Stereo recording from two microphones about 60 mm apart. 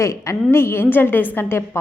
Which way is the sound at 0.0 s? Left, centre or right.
Left.